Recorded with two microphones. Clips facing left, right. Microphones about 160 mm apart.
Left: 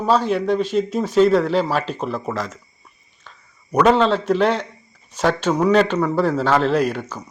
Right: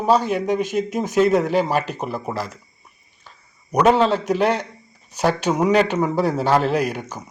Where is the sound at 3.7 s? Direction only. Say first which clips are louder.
Left 1 dB; 10° right (ahead or behind).